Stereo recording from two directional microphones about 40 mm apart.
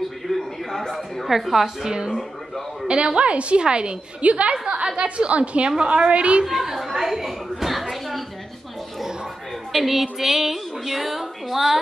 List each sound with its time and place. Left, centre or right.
0.3 s a sound: centre
0.9 s a woman's voice: centre
1.9 s a woman's voice: centre
6.4 s a sound: centre
9.7 s speech: centre
10.1 s music: centre